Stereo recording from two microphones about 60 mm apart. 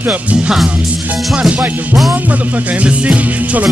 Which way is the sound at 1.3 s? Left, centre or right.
Right.